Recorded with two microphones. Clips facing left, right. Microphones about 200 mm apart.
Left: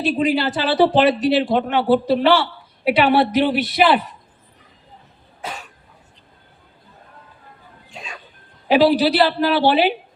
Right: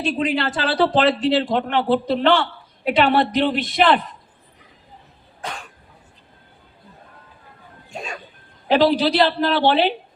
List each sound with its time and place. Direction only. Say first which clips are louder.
0.1 s a man's voice: left 3 dB; 10° left (ahead or behind)
5.4 s cough: even; 5° left (ahead or behind)
7.9 s music: right 5 dB; 45° right (ahead or behind)
8.7 s a man's voice: left 2 dB; 5° left (ahead or behind)